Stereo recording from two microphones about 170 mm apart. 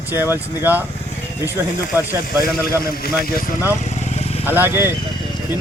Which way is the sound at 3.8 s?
40° left (ahead or behind).